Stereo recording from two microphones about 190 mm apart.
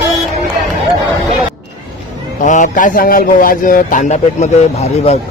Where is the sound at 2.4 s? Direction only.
40° left (ahead or behind).